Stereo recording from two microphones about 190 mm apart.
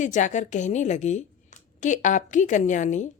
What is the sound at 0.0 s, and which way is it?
A woman's voice, 40° left (ahead or behind).